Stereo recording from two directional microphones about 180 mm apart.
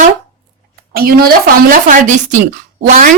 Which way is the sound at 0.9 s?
55° right (ahead or behind).